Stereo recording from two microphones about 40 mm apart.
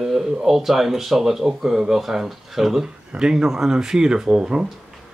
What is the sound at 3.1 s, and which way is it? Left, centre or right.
Speech, centre.